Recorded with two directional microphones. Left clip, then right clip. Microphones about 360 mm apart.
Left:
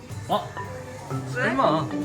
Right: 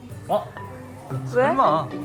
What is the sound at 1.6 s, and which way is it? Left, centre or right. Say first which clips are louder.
Speech: even; centre.